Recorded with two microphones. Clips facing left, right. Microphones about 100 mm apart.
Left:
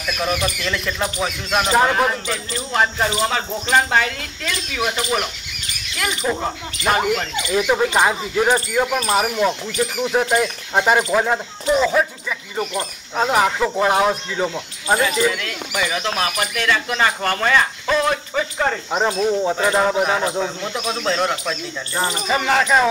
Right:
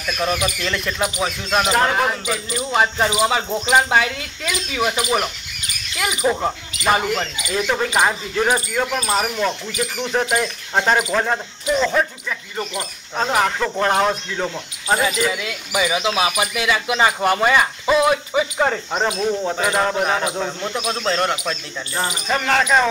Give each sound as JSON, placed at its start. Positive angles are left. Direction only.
{"t": 0.2, "sound": "speech", "side_deg": 0}
{"t": 7.5, "sound": "speech", "side_deg": 10}
{"t": 15.3, "sound": "speech", "side_deg": -10}
{"t": 19.1, "sound": "speech", "side_deg": 5}